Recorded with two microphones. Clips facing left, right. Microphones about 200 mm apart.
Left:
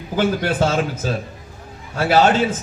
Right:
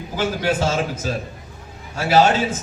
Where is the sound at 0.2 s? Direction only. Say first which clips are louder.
Left 3 dB; 55° left (ahead or behind).